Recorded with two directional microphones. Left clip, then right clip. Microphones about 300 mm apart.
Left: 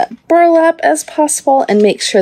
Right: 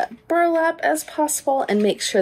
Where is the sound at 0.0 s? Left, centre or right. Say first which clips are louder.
Left 10 dB; left.